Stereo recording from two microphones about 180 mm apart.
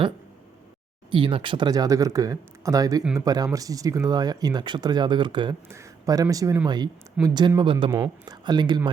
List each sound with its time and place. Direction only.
1.1 s speech: 30° right (ahead or behind)
5.6 s speech: 15° right (ahead or behind)
7.9 s speech: 15° right (ahead or behind)